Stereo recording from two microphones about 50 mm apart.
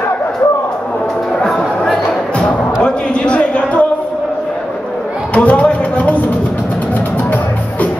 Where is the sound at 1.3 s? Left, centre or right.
Centre.